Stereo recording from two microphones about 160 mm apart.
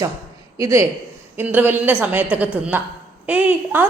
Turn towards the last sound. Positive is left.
turn(degrees=-10)  # may be behind; listen again after turning